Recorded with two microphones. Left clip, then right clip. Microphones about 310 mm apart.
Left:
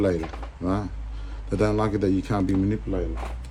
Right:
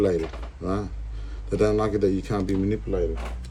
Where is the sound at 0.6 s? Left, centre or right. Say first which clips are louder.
Left 1 dB; left.